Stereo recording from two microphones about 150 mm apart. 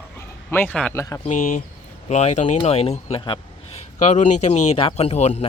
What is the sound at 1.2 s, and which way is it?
Speech, 55° left (ahead or behind).